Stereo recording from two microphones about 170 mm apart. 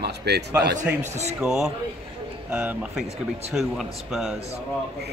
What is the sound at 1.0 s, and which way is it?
Speech, 40° right (ahead or behind).